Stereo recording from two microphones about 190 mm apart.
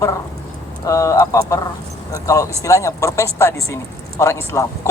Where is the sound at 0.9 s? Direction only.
15° left (ahead or behind).